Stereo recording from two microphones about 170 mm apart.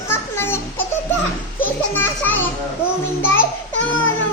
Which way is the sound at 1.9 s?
10° left (ahead or behind).